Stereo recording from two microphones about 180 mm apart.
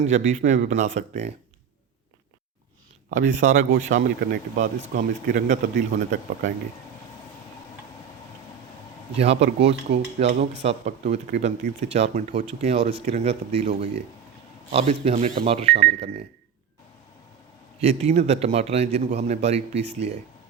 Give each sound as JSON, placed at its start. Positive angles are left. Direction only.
{"t": 0.0, "sound": "speech", "side_deg": -40}
{"t": 3.1, "sound": "speech", "side_deg": -45}
{"t": 4.8, "sound": "speech", "side_deg": -90}
{"t": 5.2, "sound": "speech", "side_deg": -45}
{"t": 5.7, "sound": "speech", "side_deg": -90}
{"t": 9.1, "sound": "speech", "side_deg": -35}
{"t": 9.4, "sound": "speech", "side_deg": -80}
{"t": 10.7, "sound": "speech", "side_deg": -40}
{"t": 17.7, "sound": "speech", "side_deg": -35}